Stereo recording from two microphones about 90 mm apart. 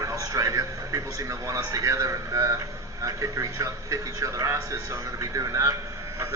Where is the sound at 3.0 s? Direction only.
35° right (ahead or behind).